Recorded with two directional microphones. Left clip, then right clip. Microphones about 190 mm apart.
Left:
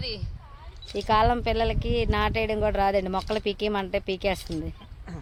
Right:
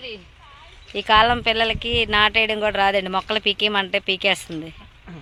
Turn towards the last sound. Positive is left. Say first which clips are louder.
# right 7 dB
turn(degrees=5)  # may be behind; listen again after turning